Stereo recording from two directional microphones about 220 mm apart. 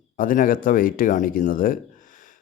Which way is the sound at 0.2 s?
40° left (ahead or behind).